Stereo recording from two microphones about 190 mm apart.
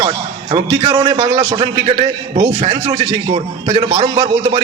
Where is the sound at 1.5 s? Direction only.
30° right (ahead or behind).